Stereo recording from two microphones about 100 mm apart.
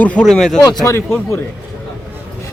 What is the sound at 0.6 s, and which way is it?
Speech, 40° left (ahead or behind).